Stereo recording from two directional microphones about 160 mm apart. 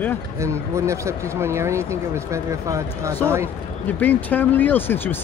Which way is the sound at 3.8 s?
10° left (ahead or behind).